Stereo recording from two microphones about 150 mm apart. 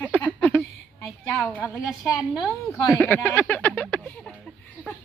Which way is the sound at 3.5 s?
10° left (ahead or behind).